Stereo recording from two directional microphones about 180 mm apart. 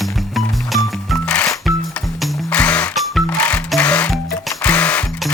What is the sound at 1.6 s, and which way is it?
Music, centre (ahead or behind).